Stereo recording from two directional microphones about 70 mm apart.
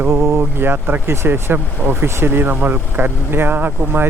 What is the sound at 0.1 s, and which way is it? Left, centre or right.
Speech, right.